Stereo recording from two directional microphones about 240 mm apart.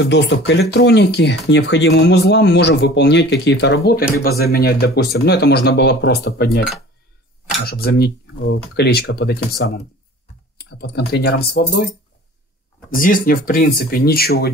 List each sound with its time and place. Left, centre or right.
0.1 s speech: left
7.6 s speech: left
12.9 s speech: left